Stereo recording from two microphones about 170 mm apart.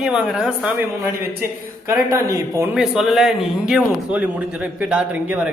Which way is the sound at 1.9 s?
20° right (ahead or behind).